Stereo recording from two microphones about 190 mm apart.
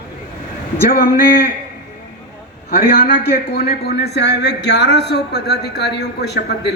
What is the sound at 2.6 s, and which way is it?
A man's voice, 50° left (ahead or behind).